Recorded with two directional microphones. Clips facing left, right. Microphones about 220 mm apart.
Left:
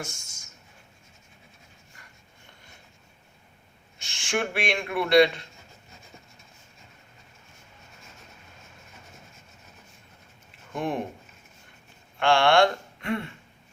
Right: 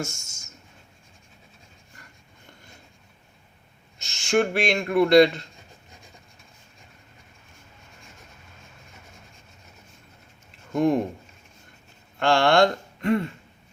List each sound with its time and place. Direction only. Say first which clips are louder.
0.0 s a sound: right 6 dB; 45° right (ahead or behind)
3.9 s speech: right 7 dB; 40° right (ahead or behind)
10.7 s speech: right 8 dB; 40° right (ahead or behind)
12.2 s speech: right 1 dB; 40° right (ahead or behind)